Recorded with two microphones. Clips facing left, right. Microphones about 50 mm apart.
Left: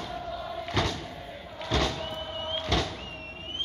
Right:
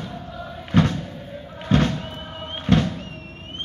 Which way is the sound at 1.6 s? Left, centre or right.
Right.